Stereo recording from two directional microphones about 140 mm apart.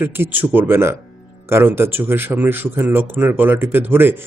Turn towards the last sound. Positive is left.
turn(degrees=-15)  # may be behind; listen again after turning